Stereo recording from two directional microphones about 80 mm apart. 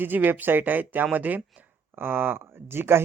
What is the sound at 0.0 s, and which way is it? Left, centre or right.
Speech, right.